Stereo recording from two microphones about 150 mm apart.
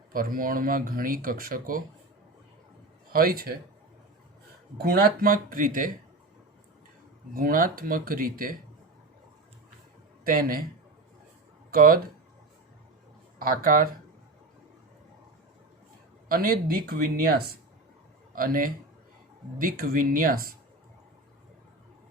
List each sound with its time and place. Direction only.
0.1 s speech: 70° right (ahead or behind)
3.1 s speech: 75° right (ahead or behind)
4.8 s speech: 85° right; by 5.9 s 65° right (ahead or behind)
7.3 s speech: 65° right (ahead or behind)
10.2 s speech: 70° right (ahead or behind)
11.7 s speech: 75° right (ahead or behind)
13.4 s speech: 70° right (ahead or behind)
16.3 s speech: 75° right (ahead or behind); by 17.6 s 90° right
18.3 s speech: 70° right (ahead or behind)